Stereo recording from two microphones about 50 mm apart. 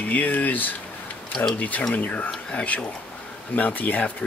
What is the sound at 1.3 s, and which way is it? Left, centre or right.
Speech, centre.